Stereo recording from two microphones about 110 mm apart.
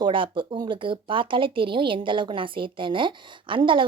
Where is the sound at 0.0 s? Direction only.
50° right (ahead or behind).